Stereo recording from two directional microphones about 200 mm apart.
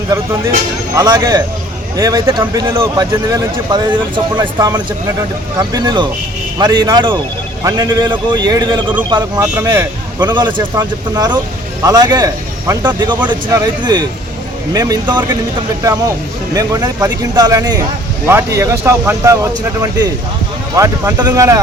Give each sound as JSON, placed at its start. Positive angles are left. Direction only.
{"t": 0.9, "sound": "a man's voice", "side_deg": -20}
{"t": 13.8, "sound": "speech", "side_deg": -20}
{"t": 16.6, "sound": "speech", "side_deg": -20}